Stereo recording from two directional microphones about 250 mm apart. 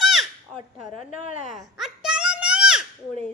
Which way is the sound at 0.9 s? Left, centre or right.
Left.